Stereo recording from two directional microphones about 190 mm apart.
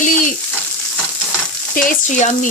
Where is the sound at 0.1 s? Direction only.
45° left (ahead or behind).